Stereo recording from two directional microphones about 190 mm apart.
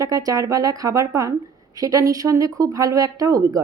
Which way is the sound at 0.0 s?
20° right (ahead or behind).